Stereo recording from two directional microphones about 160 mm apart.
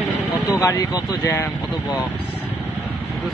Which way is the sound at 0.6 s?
20° left (ahead or behind).